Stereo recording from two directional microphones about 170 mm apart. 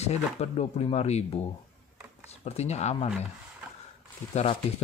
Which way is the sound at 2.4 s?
40° left (ahead or behind).